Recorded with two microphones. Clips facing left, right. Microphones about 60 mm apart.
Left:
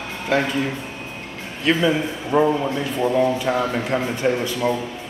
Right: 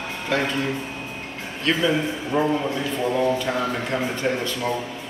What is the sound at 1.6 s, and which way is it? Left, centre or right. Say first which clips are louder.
A man's voice: left 2 dB; centre.